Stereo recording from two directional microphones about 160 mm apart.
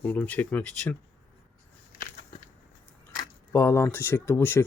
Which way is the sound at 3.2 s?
20° left (ahead or behind).